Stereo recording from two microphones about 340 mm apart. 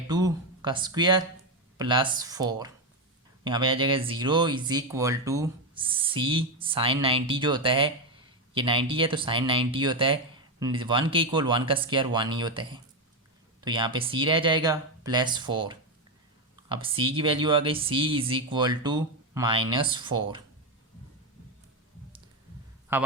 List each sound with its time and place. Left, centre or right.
0.1 s a sound: centre
1.8 s speech: centre
22.9 s speech: centre